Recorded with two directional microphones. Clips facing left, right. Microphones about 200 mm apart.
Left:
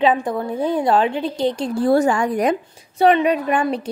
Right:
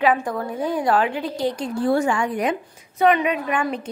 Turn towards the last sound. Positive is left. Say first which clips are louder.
# left 4 dB
turn(degrees=35)  # may be behind; listen again after turning